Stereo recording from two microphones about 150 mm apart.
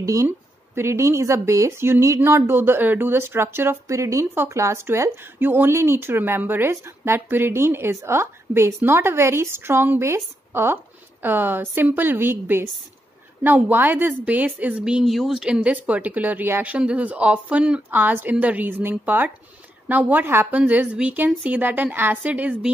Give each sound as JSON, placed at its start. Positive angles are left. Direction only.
{"t": 0.0, "sound": "speech", "side_deg": -20}